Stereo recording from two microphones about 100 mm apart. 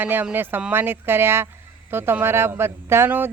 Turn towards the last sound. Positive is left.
turn(degrees=-20)  # may be behind; listen again after turning